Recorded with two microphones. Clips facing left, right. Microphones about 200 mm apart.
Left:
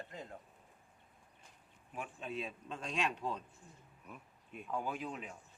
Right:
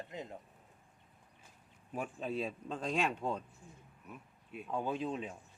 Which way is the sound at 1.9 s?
35° right (ahead or behind).